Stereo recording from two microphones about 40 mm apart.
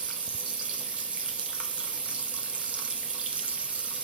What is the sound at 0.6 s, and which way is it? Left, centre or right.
Water tap, right.